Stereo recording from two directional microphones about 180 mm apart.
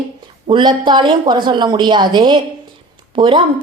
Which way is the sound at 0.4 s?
25° right (ahead or behind).